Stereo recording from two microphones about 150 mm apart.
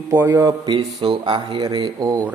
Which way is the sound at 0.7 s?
35° right (ahead or behind).